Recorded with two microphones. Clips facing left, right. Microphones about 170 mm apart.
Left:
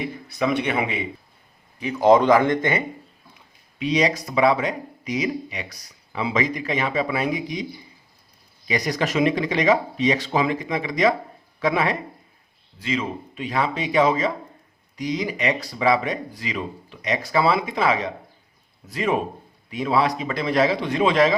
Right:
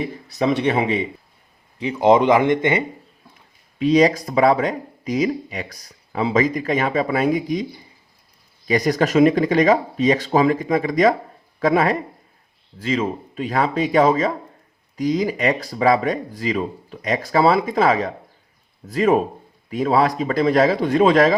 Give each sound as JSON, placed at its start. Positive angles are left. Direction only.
{"t": 0.0, "sound": "speech", "side_deg": -35}
{"t": 3.8, "sound": "speech", "side_deg": -45}